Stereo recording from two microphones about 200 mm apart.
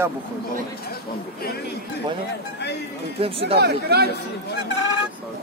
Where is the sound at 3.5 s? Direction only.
55° right (ahead or behind).